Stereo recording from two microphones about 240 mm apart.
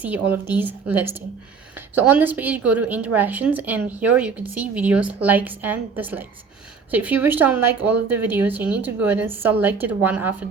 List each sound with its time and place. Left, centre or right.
0.0 s a woman's voice: centre